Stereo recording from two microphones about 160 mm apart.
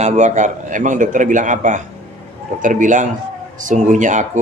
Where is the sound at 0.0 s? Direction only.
45° right (ahead or behind).